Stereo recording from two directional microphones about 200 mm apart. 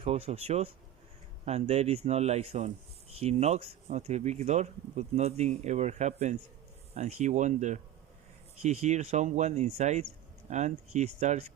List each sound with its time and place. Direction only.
0.0 s speech: 30° right (ahead or behind)